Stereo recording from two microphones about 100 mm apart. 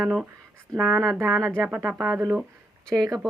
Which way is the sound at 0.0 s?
5° right (ahead or behind).